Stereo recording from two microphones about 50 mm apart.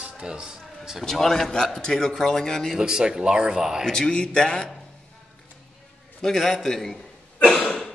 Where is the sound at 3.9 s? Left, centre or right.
Centre.